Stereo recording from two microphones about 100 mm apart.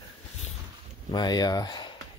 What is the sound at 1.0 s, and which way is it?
Speech, 45° left (ahead or behind).